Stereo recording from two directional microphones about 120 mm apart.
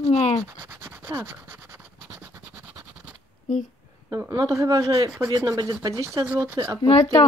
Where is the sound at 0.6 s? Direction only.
20° right (ahead or behind).